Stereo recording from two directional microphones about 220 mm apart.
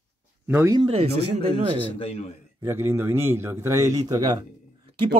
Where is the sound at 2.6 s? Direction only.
10° right (ahead or behind).